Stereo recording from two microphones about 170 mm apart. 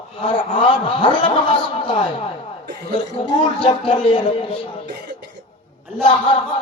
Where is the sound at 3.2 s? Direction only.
40° left (ahead or behind).